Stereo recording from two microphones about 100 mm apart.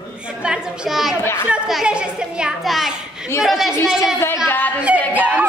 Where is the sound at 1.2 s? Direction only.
25° left (ahead or behind).